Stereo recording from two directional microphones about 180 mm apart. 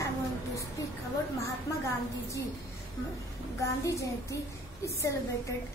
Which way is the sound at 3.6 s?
15° left (ahead or behind).